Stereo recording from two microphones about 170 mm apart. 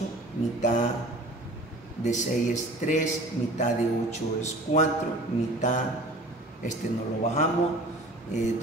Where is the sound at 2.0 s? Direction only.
45° left (ahead or behind).